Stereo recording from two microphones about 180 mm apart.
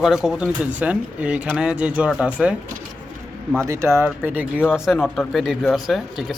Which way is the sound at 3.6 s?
15° right (ahead or behind).